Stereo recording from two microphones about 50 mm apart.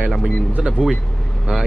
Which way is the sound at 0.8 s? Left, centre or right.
Centre.